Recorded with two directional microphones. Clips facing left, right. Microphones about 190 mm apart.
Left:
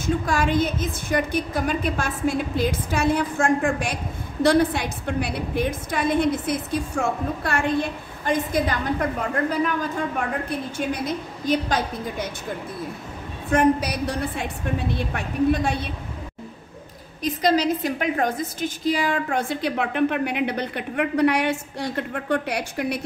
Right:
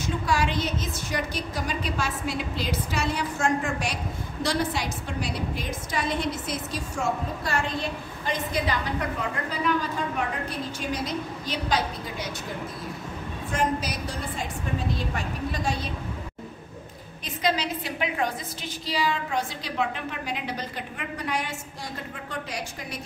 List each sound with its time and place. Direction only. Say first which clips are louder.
0.0 s a woman's voice: left 3 dB; 50° left (ahead or behind)
13.5 s a woman's voice: left 8 dB; 60° left (ahead or behind)
17.2 s a woman's voice: left 7 dB; 40° left (ahead or behind); by 22.9 s 65° left (ahead or behind)